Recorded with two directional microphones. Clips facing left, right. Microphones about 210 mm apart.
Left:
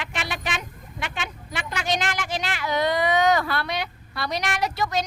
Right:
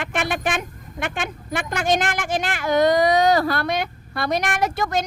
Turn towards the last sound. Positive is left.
turn(degrees=-50)  # may be behind; listen again after turning